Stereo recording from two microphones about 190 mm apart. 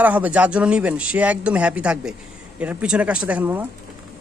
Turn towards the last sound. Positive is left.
turn(degrees=-10)  # may be behind; listen again after turning